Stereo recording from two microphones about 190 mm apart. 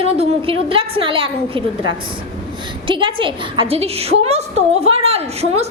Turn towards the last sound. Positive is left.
turn(degrees=-35)  # may be behind; listen again after turning